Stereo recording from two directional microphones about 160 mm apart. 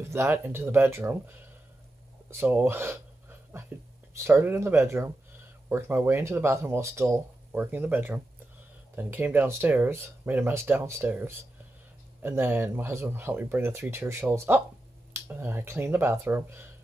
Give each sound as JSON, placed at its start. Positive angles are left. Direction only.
{"t": 0.1, "sound": "speech", "side_deg": -15}
{"t": 2.4, "sound": "a sound", "side_deg": -10}
{"t": 4.1, "sound": "speech", "side_deg": -15}